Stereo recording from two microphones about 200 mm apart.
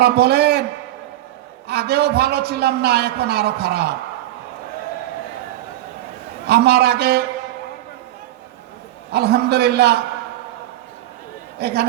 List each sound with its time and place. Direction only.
0.0 s a man's voice: 55° right (ahead or behind)
1.6 s a man's voice: 55° right (ahead or behind)
6.5 s a man's voice: 55° right (ahead or behind)
9.1 s a man's voice: 55° right (ahead or behind)
11.6 s a man's voice: 55° right (ahead or behind)